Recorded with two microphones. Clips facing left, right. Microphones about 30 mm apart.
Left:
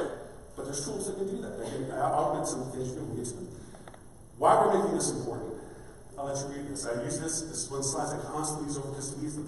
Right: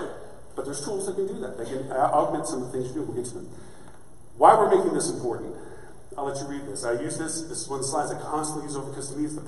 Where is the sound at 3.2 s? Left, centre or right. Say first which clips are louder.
Right 5 dB; right.